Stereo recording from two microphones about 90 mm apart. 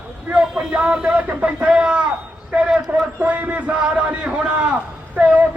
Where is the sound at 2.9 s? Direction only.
25° right (ahead or behind).